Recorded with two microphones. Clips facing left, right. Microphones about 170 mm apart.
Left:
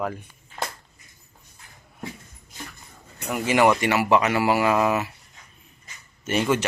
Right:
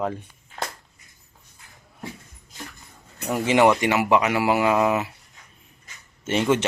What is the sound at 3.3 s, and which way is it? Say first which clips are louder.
A man's voice: right 2 dB; 20° right (ahead or behind).